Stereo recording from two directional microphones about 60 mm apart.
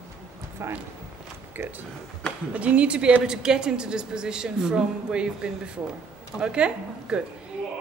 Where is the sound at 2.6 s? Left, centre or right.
Right.